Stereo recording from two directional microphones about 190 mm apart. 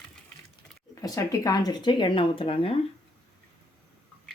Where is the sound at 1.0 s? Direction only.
20° left (ahead or behind).